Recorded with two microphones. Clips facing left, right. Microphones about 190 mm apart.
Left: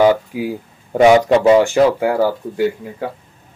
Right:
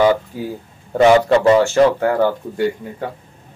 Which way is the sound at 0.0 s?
10° left (ahead or behind).